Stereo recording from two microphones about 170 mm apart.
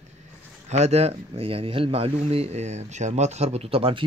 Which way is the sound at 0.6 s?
40° right (ahead or behind).